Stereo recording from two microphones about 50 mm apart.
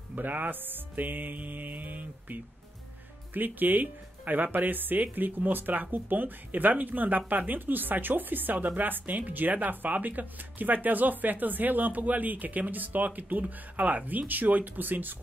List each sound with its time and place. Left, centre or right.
0.1 s speech: right